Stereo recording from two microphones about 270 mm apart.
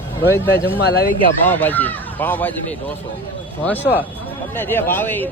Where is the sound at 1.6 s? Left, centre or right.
Centre.